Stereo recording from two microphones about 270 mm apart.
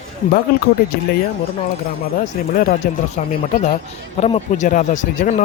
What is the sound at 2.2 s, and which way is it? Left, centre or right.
Speech, left.